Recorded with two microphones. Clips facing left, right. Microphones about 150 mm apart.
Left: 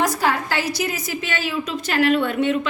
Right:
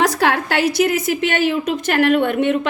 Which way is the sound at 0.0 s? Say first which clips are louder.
Right 4 dB; 70° right (ahead or behind).